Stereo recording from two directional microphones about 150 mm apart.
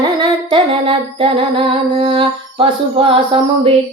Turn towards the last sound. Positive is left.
turn(degrees=-40)  # may be behind; listen again after turning